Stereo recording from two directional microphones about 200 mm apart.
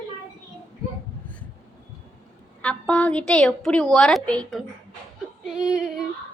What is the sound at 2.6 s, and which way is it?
A woman's voice, 5° left (ahead or behind).